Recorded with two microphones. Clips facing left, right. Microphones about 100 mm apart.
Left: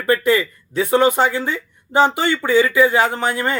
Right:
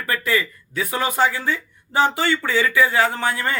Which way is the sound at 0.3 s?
25° left (ahead or behind).